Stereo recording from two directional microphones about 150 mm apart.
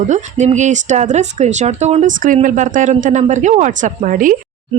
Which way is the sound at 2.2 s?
60° right (ahead or behind).